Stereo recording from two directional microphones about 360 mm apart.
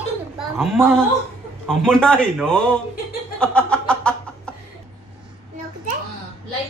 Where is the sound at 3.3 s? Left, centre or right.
Centre.